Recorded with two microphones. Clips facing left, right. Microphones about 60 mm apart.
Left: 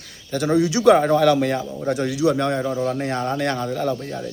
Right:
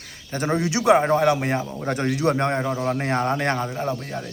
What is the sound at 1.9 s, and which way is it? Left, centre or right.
Speech, right.